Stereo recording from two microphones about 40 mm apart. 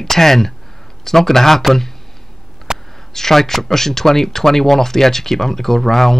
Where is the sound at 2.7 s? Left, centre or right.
Centre.